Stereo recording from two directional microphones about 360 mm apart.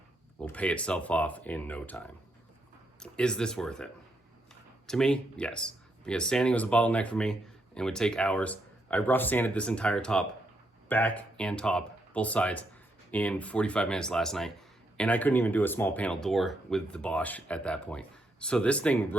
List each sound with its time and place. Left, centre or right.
0.3 s speech: centre
4.9 s speech: centre